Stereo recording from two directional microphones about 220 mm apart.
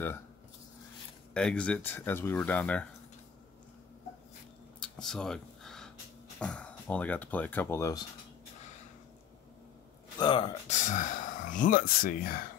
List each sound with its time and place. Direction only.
1.3 s speech: 5° left (ahead or behind)
5.0 s a sound: 5° left (ahead or behind)
6.4 s speech: 5° left (ahead or behind)
10.1 s speech: 20° left (ahead or behind); by 12.4 s 40° left (ahead or behind)